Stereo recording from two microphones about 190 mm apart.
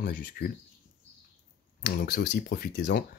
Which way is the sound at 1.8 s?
55° left (ahead or behind).